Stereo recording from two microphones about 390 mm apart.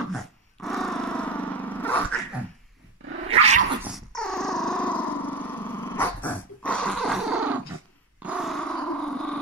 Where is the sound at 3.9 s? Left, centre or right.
Centre.